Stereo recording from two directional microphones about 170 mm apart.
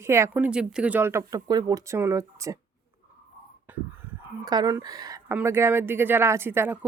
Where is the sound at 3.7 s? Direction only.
10° right (ahead or behind).